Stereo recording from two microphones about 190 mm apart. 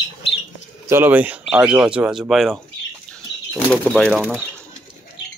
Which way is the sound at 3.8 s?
5° left (ahead or behind).